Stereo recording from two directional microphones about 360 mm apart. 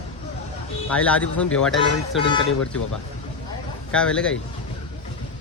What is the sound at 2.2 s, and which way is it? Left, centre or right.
Speech, centre.